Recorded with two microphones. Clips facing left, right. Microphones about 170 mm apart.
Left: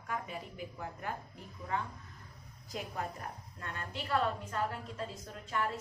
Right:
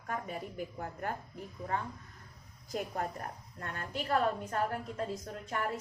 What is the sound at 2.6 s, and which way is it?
A woman's voice, 45° right (ahead or behind).